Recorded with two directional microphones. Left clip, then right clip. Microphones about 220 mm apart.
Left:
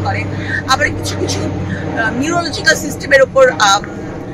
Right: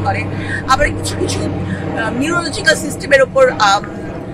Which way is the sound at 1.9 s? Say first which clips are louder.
Left 1 dB; 5° right (ahead or behind).